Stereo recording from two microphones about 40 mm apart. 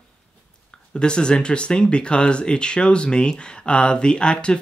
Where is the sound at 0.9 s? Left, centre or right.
Left.